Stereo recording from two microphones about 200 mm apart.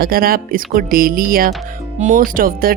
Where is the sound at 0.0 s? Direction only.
45° right (ahead or behind).